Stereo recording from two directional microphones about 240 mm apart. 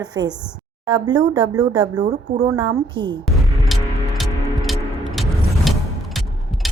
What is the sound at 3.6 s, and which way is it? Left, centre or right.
Music, centre.